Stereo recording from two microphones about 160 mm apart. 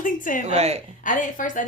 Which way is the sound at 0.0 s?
55° left (ahead or behind).